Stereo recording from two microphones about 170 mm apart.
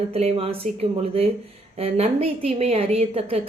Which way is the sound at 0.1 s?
35° right (ahead or behind).